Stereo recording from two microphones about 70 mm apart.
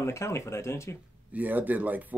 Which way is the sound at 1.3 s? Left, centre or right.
Right.